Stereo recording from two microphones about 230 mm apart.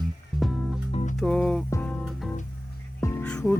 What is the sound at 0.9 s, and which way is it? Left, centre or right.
Music, left.